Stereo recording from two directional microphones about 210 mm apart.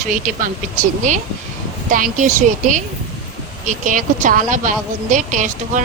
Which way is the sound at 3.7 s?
40° right (ahead or behind).